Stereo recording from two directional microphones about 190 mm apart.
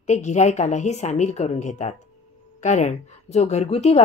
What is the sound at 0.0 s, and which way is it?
A woman's voice, 35° left (ahead or behind).